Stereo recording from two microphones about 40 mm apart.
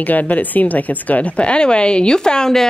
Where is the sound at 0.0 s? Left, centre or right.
Left.